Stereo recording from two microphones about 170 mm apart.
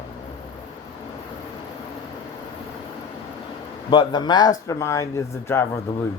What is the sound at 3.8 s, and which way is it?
Speech, 25° left (ahead or behind).